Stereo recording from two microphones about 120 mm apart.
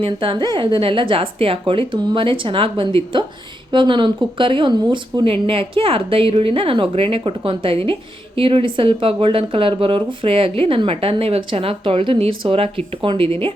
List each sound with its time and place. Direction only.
0.0 s speech: 45° right (ahead or behind)